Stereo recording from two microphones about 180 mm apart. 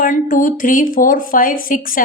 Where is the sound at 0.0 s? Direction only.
50° left (ahead or behind).